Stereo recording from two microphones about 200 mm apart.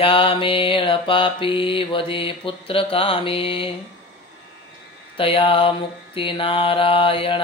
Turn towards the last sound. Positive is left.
turn(degrees=25)  # may be behind; listen again after turning